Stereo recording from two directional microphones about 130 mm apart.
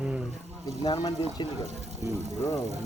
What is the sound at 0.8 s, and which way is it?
Speech, 30° left (ahead or behind).